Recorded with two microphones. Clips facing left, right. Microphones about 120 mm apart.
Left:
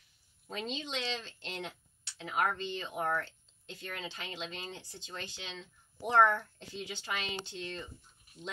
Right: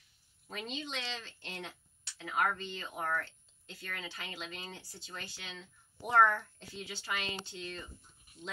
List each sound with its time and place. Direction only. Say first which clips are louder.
0.7 s speech: left 3 dB; 20° left (ahead or behind)